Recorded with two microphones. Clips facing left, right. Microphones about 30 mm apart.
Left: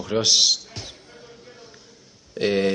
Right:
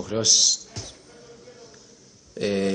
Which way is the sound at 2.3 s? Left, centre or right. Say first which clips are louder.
Left 3 dB; left.